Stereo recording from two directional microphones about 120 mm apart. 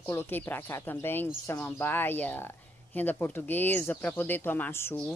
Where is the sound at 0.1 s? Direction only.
20° left (ahead or behind).